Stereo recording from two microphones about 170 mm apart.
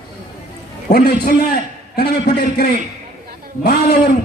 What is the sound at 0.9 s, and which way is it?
A man's voice, 70° left (ahead or behind).